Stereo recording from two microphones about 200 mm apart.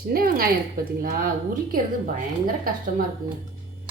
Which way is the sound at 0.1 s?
45° right (ahead or behind).